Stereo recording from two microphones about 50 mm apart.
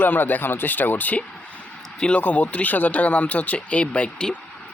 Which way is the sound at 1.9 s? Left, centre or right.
Centre.